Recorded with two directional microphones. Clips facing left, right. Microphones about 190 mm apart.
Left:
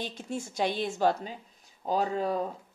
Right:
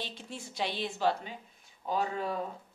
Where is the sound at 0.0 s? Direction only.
45° left (ahead or behind).